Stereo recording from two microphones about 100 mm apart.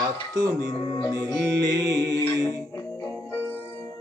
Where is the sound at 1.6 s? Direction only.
40° right (ahead or behind).